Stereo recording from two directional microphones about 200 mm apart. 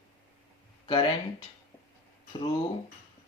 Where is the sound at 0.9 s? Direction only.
20° left (ahead or behind).